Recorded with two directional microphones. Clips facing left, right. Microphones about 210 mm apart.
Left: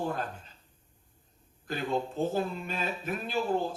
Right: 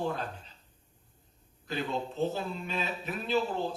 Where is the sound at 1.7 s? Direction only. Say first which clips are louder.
Left 2 dB; 50° left (ahead or behind).